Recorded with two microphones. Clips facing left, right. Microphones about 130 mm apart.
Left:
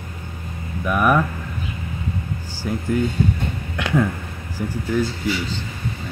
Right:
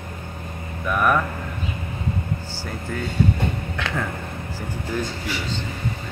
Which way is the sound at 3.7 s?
10° left (ahead or behind).